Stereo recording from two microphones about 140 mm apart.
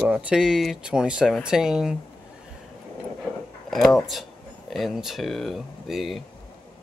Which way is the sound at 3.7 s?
Centre (ahead or behind).